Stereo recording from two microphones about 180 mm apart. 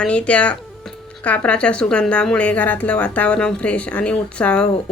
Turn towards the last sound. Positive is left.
turn(degrees=5)  # may be behind; listen again after turning